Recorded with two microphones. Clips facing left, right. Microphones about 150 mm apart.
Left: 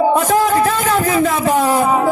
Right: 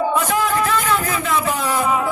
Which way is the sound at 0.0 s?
40° left (ahead or behind).